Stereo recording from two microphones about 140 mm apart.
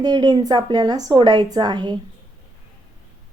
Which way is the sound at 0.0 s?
30° right (ahead or behind).